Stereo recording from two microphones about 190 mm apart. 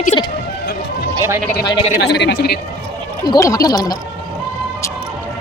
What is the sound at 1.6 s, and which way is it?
Speech, 20° left (ahead or behind).